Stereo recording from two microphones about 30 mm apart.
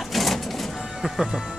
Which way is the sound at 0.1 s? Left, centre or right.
Centre.